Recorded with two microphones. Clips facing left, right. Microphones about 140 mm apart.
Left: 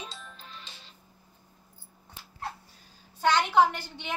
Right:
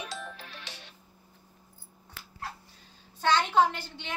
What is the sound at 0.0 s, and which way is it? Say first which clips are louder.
Music: right 4 dB; 80° right.